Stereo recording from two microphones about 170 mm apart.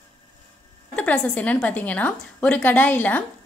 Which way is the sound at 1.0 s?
10° left (ahead or behind).